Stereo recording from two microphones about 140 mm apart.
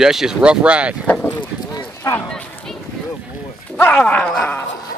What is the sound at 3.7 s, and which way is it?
Speech, 10° left (ahead or behind).